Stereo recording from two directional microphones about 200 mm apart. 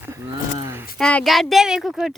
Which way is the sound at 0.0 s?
15° right (ahead or behind).